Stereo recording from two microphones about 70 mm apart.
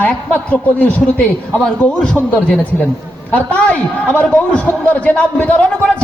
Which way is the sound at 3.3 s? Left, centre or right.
Left.